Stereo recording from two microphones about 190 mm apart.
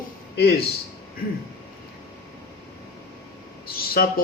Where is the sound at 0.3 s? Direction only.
55° left (ahead or behind).